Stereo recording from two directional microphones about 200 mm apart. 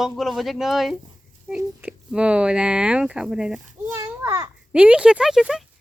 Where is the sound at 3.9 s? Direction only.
15° right (ahead or behind).